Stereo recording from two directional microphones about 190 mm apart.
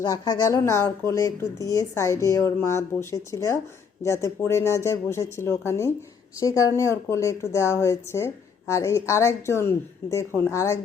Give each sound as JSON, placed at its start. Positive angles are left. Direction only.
{"t": 0.0, "sound": "speech", "side_deg": 20}